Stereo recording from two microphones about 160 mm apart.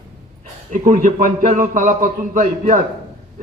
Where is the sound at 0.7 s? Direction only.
55° right (ahead or behind).